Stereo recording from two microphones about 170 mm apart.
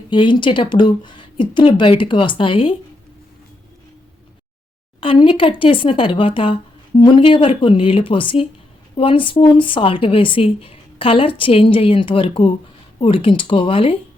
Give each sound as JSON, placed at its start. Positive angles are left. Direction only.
{"t": 0.1, "sound": "a woman's voice", "side_deg": 30}
{"t": 4.9, "sound": "speech", "side_deg": 30}